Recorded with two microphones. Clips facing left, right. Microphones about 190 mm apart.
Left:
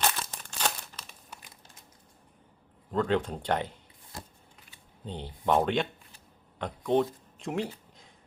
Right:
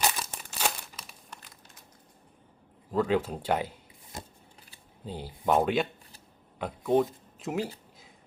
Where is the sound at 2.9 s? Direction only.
5° right (ahead or behind).